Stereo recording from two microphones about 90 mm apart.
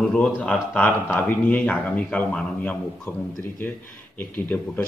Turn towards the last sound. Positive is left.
turn(degrees=20)  # may be behind; listen again after turning